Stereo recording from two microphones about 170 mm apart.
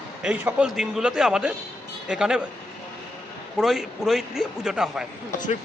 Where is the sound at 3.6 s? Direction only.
5° right (ahead or behind).